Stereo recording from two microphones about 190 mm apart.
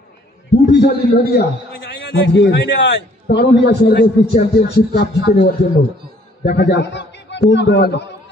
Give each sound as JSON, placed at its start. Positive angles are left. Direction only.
{"t": 0.5, "sound": "a man's voice", "side_deg": 65}